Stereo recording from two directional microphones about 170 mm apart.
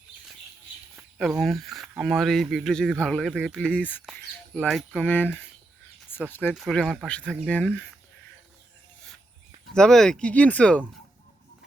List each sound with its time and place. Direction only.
1.2 s speech: centre (ahead or behind)
6.1 s a sound: 10° left (ahead or behind)
6.5 s speech: centre (ahead or behind)
9.7 s speech: 5° left (ahead or behind)